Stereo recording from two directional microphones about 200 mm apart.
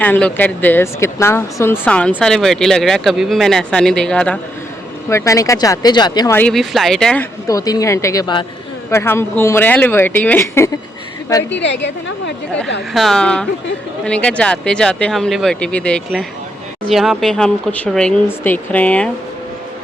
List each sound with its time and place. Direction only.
0.0 s speech: 5° left (ahead or behind)
7.4 s speech: 15° left (ahead or behind)
11.5 s a woman's voice: 60° left (ahead or behind)
12.9 s speech: centre (ahead or behind)